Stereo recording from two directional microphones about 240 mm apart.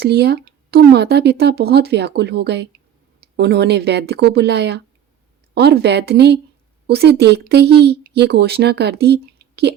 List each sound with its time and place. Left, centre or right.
0.0 s speech: right